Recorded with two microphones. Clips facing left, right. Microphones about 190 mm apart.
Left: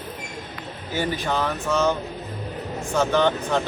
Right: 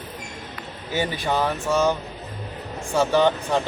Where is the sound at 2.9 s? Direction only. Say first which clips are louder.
Right 1 dB; 10° right (ahead or behind).